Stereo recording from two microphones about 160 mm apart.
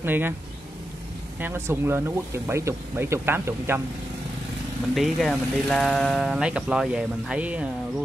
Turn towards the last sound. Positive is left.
turn(degrees=-10)  # may be behind; listen again after turning